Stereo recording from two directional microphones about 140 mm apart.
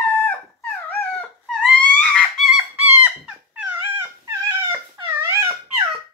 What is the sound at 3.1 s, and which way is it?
Dog, 10° right (ahead or behind).